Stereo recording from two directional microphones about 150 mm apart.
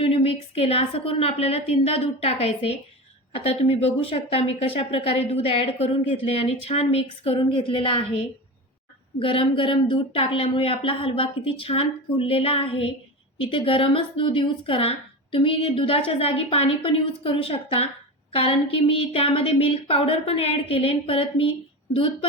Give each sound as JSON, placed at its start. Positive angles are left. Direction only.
{"t": 0.0, "sound": "speech", "side_deg": 40}